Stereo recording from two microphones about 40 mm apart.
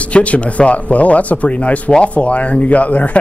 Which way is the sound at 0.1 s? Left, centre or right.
Left.